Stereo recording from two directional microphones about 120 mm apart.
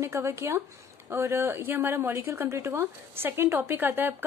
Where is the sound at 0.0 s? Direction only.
25° right (ahead or behind).